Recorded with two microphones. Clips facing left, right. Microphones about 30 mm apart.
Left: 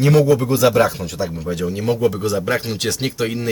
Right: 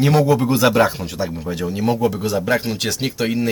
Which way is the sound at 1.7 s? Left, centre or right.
Centre.